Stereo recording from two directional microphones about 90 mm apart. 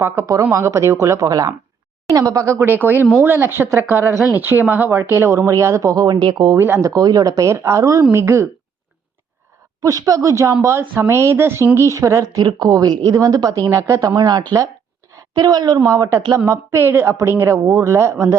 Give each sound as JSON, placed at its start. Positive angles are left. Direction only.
{"t": 0.5, "sound": "a woman's voice", "side_deg": -35}
{"t": 6.6, "sound": "a woman's voice", "side_deg": -30}
{"t": 9.8, "sound": "speech", "side_deg": -35}
{"t": 14.2, "sound": "a woman's voice", "side_deg": -45}
{"t": 16.5, "sound": "a woman's voice", "side_deg": -30}